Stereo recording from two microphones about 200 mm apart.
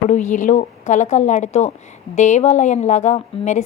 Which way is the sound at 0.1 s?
40° left (ahead or behind).